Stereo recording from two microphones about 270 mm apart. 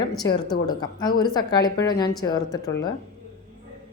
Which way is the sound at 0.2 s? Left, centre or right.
Centre.